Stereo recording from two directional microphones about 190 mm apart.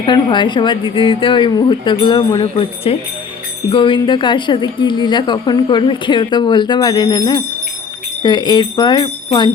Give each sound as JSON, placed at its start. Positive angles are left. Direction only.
{"t": 0.0, "sound": "a woman's voice", "side_deg": 25}